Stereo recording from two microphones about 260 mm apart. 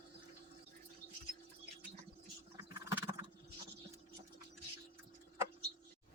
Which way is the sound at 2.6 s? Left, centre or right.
Centre.